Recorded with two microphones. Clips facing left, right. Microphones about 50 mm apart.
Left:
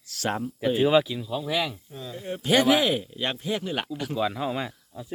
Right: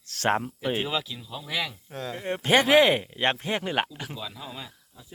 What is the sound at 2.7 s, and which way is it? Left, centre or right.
Speech, right.